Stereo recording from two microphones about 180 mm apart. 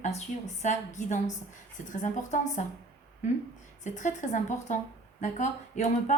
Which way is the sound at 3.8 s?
45° left (ahead or behind).